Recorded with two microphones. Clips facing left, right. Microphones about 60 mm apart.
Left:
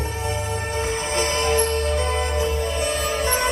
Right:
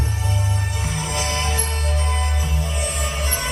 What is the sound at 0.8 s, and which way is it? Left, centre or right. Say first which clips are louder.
Music: left 3 dB; left.